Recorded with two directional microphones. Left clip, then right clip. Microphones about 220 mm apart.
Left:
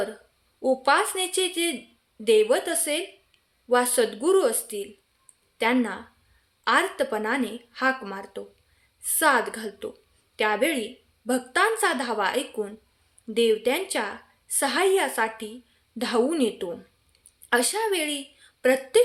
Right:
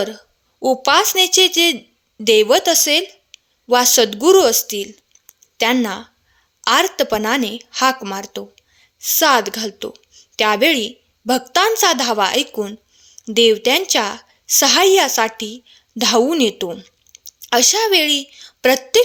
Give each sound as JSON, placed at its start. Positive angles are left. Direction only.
{"t": 0.6, "sound": "a woman's voice", "side_deg": -40}
{"t": 17.1, "sound": "a sound", "side_deg": 10}
{"t": 17.5, "sound": "a woman's voice", "side_deg": -40}